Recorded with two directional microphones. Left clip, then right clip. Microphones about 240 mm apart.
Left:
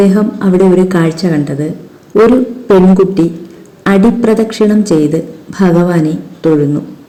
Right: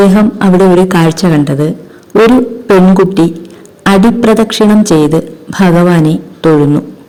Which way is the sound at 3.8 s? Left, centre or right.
Right.